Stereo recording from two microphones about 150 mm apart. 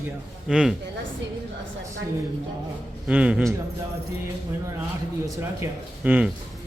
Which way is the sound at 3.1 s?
10° right (ahead or behind).